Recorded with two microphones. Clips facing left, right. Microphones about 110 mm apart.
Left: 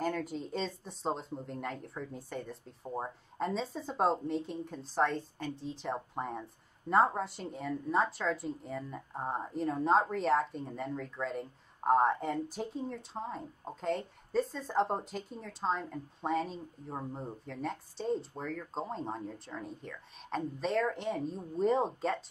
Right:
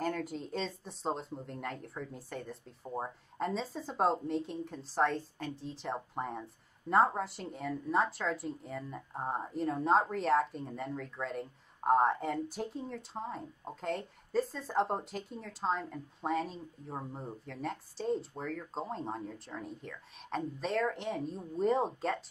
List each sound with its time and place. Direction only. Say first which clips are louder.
0.0 s speech: left 1 dB; centre (ahead or behind)